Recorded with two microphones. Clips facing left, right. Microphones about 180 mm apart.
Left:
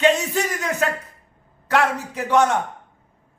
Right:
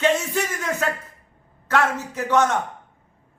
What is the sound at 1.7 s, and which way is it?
Speech, 15° left (ahead or behind).